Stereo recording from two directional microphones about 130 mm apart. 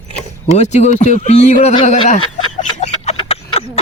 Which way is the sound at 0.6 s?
65° left (ahead or behind).